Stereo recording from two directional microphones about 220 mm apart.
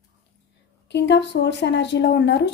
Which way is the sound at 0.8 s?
50° left (ahead or behind).